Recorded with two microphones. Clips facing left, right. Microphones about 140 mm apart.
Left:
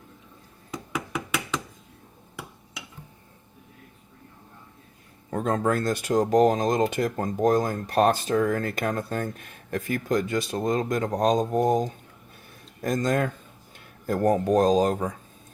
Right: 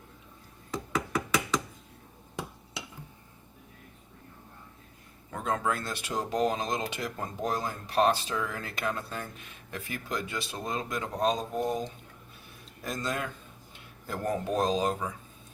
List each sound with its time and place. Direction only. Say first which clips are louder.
5.3 s speech: left 6 dB; 40° left (ahead or behind)